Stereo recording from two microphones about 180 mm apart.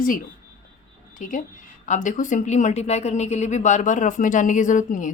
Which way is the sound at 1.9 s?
45° left (ahead or behind).